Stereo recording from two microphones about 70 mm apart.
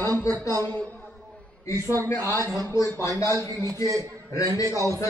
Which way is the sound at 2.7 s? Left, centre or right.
Left.